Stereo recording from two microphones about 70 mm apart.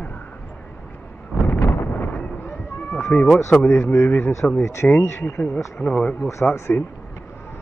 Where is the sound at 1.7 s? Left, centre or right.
Left.